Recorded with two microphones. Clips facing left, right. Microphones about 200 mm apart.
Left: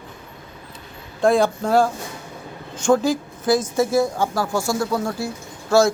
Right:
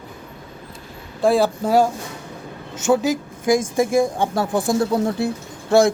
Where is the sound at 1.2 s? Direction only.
5° right (ahead or behind).